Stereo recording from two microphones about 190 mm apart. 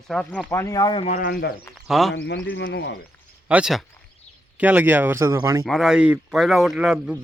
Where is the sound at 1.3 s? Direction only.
55° left (ahead or behind).